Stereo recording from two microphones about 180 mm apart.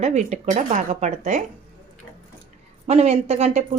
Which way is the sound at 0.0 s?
40° right (ahead or behind).